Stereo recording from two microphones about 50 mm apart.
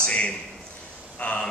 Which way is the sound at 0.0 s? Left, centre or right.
Left.